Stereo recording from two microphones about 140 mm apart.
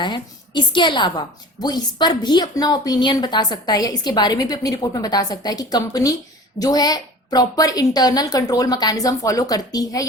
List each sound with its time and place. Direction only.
0.0 s a woman's voice: 35° left (ahead or behind)